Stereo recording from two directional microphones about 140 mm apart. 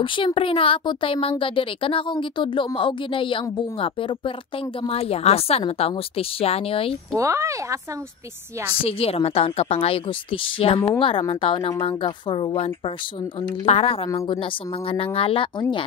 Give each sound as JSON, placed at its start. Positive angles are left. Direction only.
{"t": 0.0, "sound": "a woman's voice", "side_deg": 35}
{"t": 7.2, "sound": "speech", "side_deg": -20}
{"t": 8.8, "sound": "a woman's voice", "side_deg": 45}
{"t": 14.0, "sound": "speech", "side_deg": 30}
{"t": 14.3, "sound": "a woman's voice", "side_deg": 40}